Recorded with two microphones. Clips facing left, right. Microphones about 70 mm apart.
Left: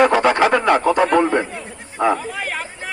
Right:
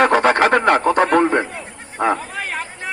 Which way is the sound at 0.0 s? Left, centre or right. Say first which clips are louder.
Even; right.